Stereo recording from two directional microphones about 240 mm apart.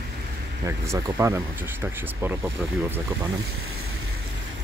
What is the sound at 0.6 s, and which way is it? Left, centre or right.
Speech, centre.